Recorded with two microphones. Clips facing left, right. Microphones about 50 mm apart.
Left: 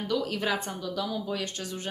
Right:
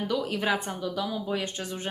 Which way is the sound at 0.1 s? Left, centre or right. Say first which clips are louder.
Even; centre.